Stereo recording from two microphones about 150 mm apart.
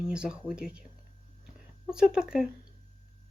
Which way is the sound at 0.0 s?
5° right (ahead or behind).